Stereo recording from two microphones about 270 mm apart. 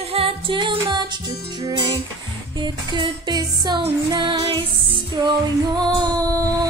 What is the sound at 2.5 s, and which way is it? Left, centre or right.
Music, centre.